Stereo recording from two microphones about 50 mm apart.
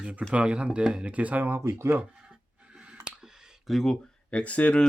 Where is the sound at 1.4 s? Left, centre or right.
Right.